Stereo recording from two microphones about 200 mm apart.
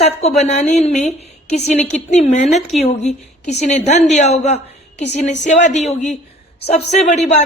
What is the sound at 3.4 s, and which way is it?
A woman's voice, 35° left (ahead or behind).